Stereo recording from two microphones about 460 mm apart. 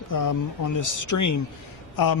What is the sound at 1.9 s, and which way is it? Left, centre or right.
Speech, left.